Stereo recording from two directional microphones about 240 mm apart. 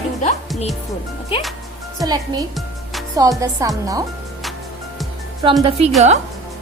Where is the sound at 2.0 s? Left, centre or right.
Centre.